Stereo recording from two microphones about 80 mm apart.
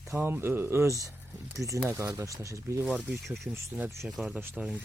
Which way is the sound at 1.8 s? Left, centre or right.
Right.